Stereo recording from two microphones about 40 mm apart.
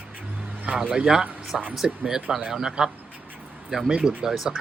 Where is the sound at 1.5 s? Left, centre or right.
Centre.